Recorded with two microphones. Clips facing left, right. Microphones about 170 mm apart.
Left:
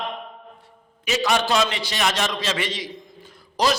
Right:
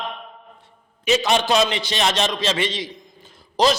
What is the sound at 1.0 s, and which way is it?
A man's voice, 20° right (ahead or behind).